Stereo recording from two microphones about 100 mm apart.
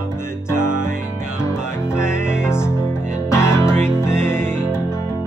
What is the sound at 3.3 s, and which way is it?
Music, 25° left (ahead or behind).